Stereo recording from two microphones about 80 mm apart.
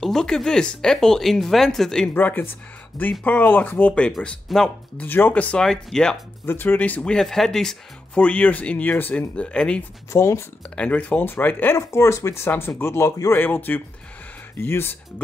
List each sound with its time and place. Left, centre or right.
0.0 s speech: centre
2.1 s speech: left
4.5 s speech: centre
4.9 s speech: left; by 6.1 s centre
6.4 s speech: left
7.2 s speech: centre; by 9.2 s left
9.3 s speech: centre
10.1 s speech: left
10.8 s speech: centre